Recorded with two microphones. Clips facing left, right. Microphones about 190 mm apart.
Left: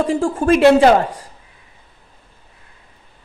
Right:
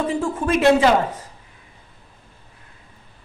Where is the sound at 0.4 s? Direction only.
50° left (ahead or behind).